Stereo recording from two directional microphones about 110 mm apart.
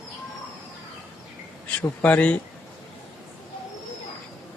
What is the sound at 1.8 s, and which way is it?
Speech, 10° left (ahead or behind).